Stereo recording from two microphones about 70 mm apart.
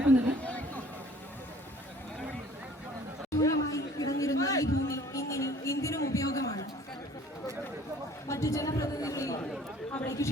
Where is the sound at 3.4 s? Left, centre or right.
Left.